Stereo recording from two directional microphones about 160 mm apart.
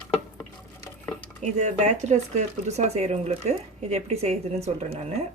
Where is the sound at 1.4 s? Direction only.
45° right (ahead or behind).